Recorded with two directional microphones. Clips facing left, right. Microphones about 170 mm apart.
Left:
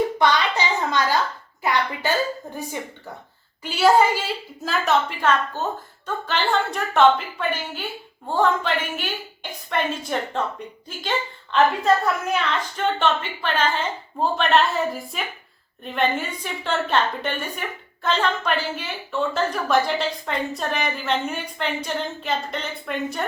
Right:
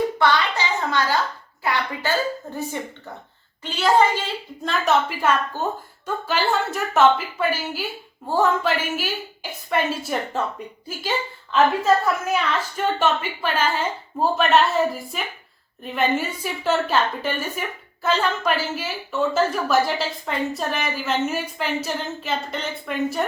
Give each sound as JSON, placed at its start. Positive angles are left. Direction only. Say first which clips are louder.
{"t": 0.2, "sound": "a sound", "louder": "even", "side_deg": 20}
{"t": 3.6, "sound": "a woman's voice", "louder": "left 1 dB", "side_deg": 10}
{"t": 11.5, "sound": "a woman's voice", "louder": "right 1 dB", "side_deg": 0}